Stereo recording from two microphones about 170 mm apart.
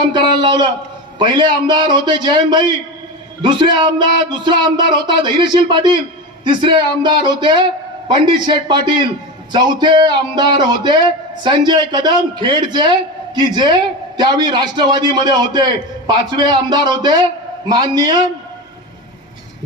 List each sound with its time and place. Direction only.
0.0 s a man's voice: 25° right (ahead or behind)